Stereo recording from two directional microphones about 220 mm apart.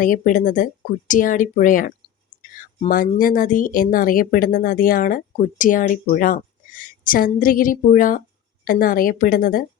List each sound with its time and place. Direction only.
0.0 s speech: 40° left (ahead or behind)